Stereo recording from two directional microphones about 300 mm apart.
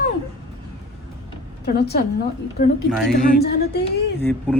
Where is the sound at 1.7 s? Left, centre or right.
Left.